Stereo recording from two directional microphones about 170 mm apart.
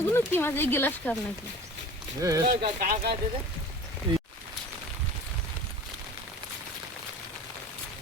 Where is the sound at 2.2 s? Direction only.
20° right (ahead or behind).